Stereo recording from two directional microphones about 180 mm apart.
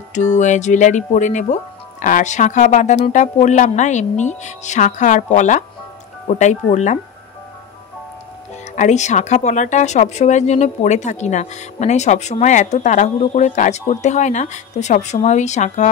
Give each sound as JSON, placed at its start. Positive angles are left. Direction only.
{"t": 0.4, "sound": "speech", "side_deg": 40}
{"t": 8.7, "sound": "speech", "side_deg": 40}